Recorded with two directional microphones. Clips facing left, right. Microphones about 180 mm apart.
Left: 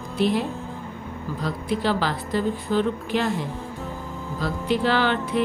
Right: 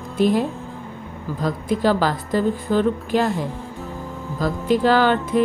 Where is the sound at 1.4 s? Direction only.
45° right (ahead or behind).